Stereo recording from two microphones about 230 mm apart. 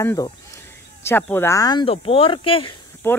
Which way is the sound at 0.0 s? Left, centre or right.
Centre.